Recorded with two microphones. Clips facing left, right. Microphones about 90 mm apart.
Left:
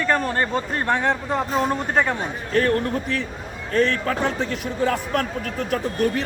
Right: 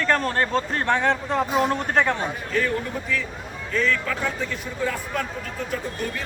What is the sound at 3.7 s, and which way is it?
Speech, 50° left (ahead or behind).